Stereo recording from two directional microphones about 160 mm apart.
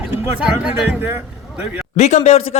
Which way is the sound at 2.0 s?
45° left (ahead or behind).